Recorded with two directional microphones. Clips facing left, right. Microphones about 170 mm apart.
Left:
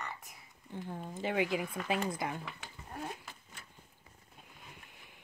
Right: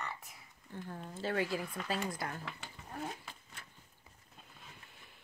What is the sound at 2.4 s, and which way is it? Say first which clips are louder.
Speech: even; 5° left (ahead or behind).